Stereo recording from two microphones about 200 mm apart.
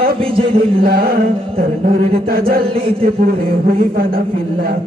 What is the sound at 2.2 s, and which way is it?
Speech, 50° right (ahead or behind).